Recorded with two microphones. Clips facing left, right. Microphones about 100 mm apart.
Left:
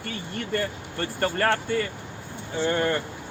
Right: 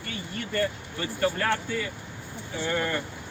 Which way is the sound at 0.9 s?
55° left (ahead or behind).